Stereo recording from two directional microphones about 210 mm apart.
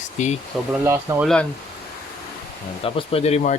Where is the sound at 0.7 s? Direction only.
5° right (ahead or behind).